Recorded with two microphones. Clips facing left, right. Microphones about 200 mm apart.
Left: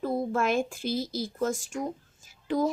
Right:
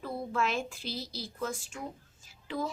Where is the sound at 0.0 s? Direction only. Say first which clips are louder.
Left 6 dB; 45° left (ahead or behind).